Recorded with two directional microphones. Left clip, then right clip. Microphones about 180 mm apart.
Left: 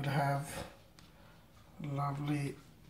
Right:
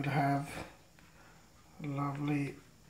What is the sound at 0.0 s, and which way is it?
Speech, 25° right (ahead or behind).